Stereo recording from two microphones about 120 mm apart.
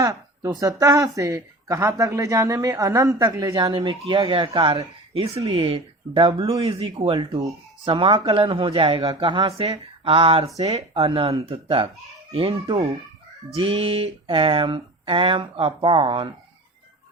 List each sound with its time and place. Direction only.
0.0 s speech: 30° right (ahead or behind)
5.1 s speech: 55° right (ahead or behind)